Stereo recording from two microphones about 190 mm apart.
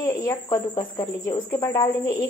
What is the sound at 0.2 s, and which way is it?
A woman's voice, 15° left (ahead or behind).